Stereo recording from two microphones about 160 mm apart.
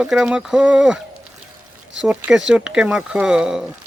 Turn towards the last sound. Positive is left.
turn(degrees=-5)  # may be behind; listen again after turning